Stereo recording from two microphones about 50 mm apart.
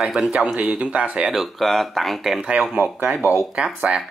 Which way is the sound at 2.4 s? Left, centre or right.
Centre.